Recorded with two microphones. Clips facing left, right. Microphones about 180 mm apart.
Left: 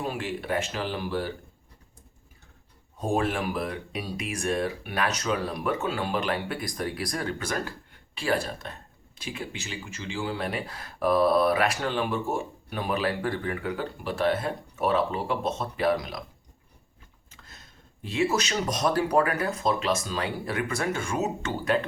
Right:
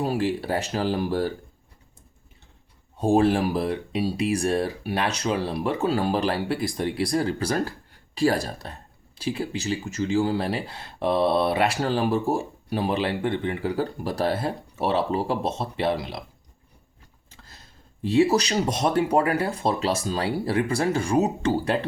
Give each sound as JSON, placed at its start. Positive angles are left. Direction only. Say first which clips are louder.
{"t": 0.0, "sound": "speech", "louder": "right 7 dB", "side_deg": -35}
{"t": 3.0, "sound": "speech", "louder": "right 7 dB", "side_deg": -30}
{"t": 17.3, "sound": "speech", "louder": "right 1 dB", "side_deg": -30}